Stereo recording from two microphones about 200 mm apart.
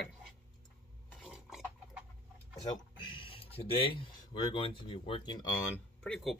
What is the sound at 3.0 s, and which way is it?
Speech, 25° left (ahead or behind).